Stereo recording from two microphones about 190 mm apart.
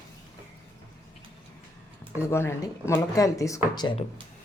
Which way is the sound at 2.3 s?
15° left (ahead or behind).